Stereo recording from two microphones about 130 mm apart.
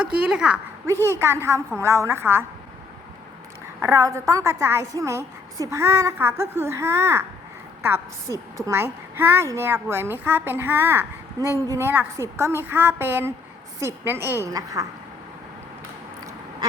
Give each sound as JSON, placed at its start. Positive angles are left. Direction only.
{"t": 0.0, "sound": "a woman's voice", "side_deg": -5}
{"t": 0.9, "sound": "speech", "side_deg": -20}
{"t": 3.8, "sound": "a woman's voice", "side_deg": -25}